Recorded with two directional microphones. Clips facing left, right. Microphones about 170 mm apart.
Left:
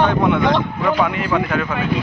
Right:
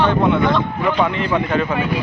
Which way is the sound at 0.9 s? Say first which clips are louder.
Even; 5° left (ahead or behind).